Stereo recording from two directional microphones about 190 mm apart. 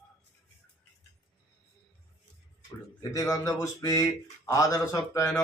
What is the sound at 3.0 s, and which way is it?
Speech, 20° left (ahead or behind).